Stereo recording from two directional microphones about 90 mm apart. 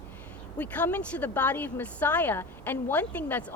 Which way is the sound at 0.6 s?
15° left (ahead or behind).